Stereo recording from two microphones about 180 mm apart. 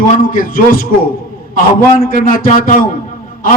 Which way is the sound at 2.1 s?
50° left (ahead or behind).